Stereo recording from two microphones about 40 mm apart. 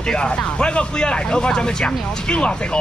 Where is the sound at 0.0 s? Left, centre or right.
Left.